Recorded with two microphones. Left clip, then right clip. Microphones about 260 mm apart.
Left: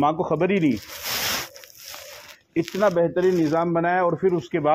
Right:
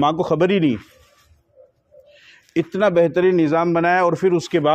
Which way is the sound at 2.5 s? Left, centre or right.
Right.